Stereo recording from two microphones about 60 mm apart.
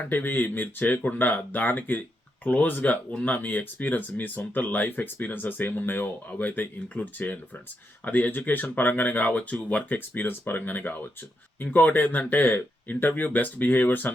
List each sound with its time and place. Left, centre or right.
0.0 s speech: left